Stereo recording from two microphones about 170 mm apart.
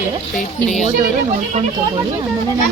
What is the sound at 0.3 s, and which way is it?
Speech, 45° left (ahead or behind).